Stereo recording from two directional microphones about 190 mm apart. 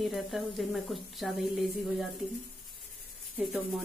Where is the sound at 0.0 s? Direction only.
Centre (ahead or behind).